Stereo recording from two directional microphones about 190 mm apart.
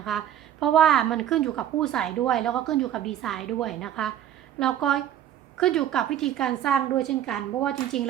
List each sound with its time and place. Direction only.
0.1 s a woman's voice: centre (ahead or behind)